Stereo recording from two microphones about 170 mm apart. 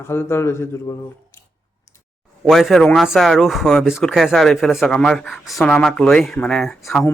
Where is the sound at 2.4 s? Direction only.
Centre (ahead or behind).